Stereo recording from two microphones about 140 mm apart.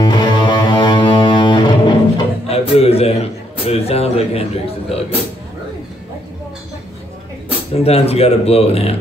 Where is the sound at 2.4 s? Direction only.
45° left (ahead or behind).